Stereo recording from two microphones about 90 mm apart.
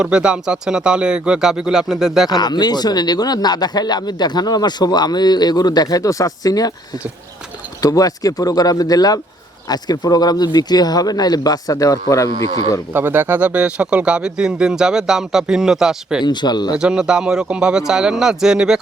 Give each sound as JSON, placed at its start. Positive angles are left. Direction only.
{"t": 0.0, "sound": "speech", "side_deg": -10}
{"t": 2.3, "sound": "speech", "side_deg": 50}
{"t": 7.8, "sound": "speech", "side_deg": 40}
{"t": 12.9, "sound": "speech", "side_deg": -20}
{"t": 16.2, "sound": "speech", "side_deg": 55}
{"t": 16.7, "sound": "speech", "side_deg": -10}